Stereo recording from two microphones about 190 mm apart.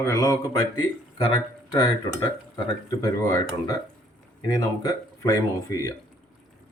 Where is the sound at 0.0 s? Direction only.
15° left (ahead or behind).